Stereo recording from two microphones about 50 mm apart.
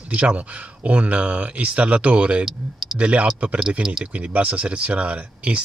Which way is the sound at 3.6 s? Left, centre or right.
Centre.